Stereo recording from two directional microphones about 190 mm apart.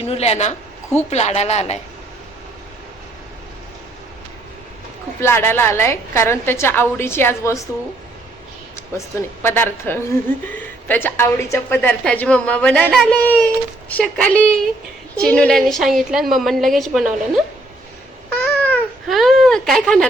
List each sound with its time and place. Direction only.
0.0 s a woman's voice: 35° left (ahead or behind)
5.2 s speech: 10° left (ahead or behind)
9.0 s a woman's voice: 10° left (ahead or behind)
18.3 s babbling: 10° left (ahead or behind)